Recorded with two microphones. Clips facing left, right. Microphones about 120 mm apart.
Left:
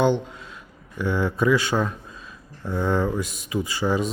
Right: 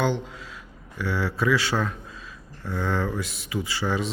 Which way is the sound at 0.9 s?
20° left (ahead or behind).